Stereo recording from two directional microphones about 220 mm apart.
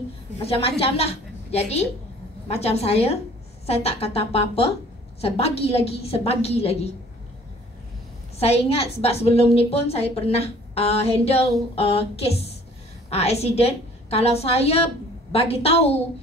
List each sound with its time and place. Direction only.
0.4 s a woman's voice: 25° left (ahead or behind)
8.4 s a woman's voice: 30° left (ahead or behind)